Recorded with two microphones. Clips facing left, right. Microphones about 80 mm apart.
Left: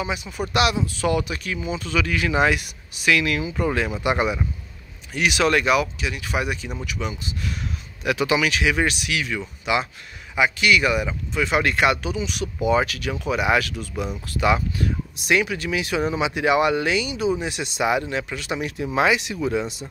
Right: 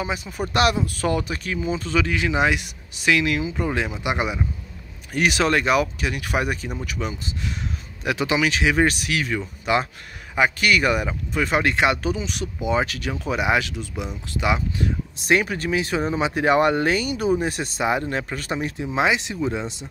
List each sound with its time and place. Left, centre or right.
0.0 s speech: right; by 4.5 s centre
5.1 s speech: right
11.6 s speech: right
12.0 s speech: right
15.1 s speech: right